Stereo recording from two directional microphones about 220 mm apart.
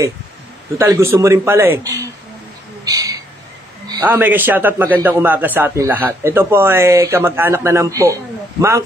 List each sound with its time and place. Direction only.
0.7 s a man's voice: 10° right (ahead or behind)
2.8 s owl: 15° right (ahead or behind)
3.8 s a man's voice: 15° right (ahead or behind)